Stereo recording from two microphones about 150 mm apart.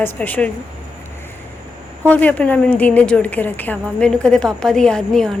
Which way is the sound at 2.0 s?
10° left (ahead or behind).